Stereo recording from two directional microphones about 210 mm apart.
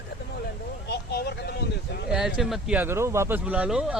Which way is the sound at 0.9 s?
50° left (ahead or behind).